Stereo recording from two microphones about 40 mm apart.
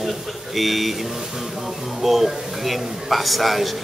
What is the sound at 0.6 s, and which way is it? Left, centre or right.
Speech, centre.